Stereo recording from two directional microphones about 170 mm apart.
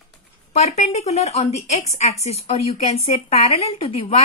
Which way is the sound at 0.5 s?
40° left (ahead or behind).